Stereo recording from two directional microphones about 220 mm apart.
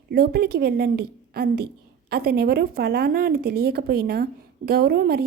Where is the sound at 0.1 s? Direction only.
45° right (ahead or behind).